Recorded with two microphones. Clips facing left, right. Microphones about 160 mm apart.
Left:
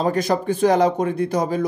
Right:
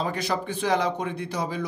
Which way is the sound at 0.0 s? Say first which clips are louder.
Left 8 dB; 45° left (ahead or behind).